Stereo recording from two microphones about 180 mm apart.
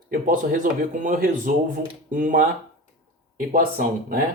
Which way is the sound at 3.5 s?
50° right (ahead or behind).